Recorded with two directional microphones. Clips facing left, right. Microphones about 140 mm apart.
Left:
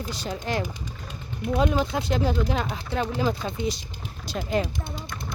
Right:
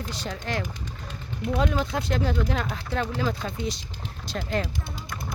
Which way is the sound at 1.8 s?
5° left (ahead or behind).